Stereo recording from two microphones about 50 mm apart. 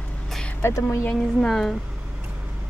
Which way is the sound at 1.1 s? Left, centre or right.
Centre.